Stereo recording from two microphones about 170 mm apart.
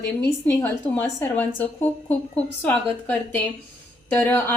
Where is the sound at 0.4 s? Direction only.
10° left (ahead or behind).